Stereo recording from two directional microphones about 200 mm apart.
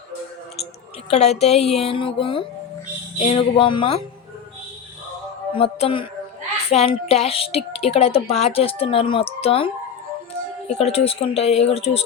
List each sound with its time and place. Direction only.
1.1 s a woman's voice: 35° left (ahead or behind)
5.5 s a woman's voice: 30° left (ahead or behind)